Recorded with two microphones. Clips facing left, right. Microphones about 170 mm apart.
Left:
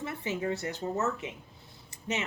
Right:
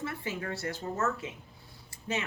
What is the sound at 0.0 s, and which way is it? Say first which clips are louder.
Speech: left 3 dB; 20° left (ahead or behind).